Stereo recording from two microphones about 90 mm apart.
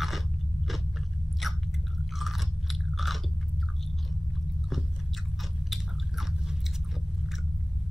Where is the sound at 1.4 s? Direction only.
Centre (ahead or behind).